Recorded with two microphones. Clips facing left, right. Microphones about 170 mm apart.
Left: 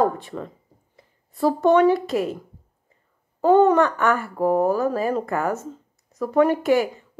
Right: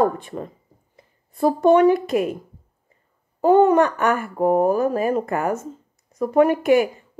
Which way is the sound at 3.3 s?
10° right (ahead or behind).